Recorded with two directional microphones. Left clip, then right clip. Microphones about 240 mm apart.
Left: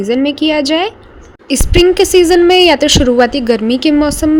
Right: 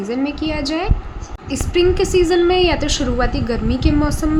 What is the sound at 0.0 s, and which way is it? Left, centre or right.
A woman's voice, left.